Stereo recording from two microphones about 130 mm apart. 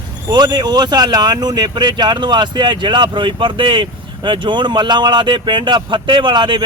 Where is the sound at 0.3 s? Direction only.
35° right (ahead or behind).